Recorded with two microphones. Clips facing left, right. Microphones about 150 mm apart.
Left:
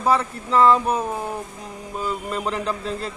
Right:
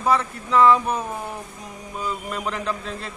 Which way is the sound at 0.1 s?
30° left (ahead or behind).